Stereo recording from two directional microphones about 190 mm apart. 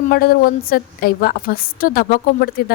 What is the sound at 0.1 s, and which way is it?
A woman's voice, 50° left (ahead or behind).